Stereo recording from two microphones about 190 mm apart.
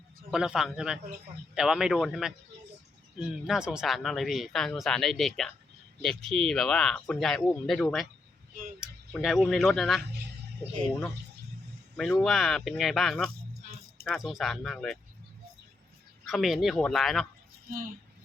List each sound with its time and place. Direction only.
0.3 s speech: 5° right (ahead or behind)
11.9 s speech: 5° left (ahead or behind)
16.2 s speech: centre (ahead or behind)